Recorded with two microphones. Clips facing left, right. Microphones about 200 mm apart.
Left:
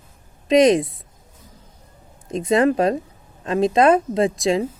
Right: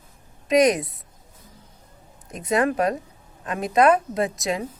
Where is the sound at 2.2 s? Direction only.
25° left (ahead or behind).